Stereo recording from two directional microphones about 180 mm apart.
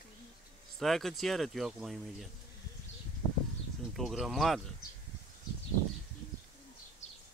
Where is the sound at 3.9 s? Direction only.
Centre (ahead or behind).